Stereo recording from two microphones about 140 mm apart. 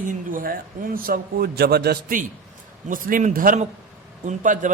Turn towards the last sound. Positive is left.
turn(degrees=-65)  # may be behind; listen again after turning